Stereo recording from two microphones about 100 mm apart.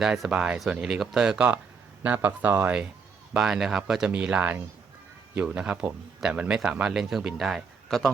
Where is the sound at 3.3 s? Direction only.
5° right (ahead or behind).